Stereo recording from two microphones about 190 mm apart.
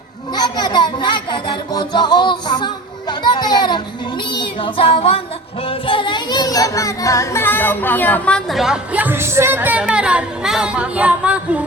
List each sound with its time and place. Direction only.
0.3 s music: 20° left (ahead or behind)
5.6 s speech: 30° left (ahead or behind); by 11.6 s 5° right (ahead or behind)